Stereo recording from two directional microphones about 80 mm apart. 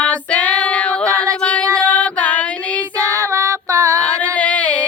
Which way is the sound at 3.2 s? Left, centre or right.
Right.